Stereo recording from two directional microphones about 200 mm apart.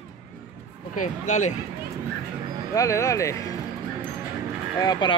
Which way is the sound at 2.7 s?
15° left (ahead or behind).